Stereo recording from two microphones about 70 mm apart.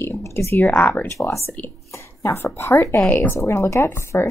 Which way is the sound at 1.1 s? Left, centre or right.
Left.